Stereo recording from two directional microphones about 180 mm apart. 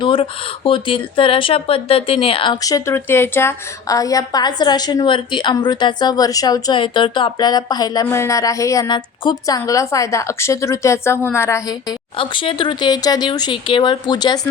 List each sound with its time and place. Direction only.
0.0 s speech: 30° left (ahead or behind)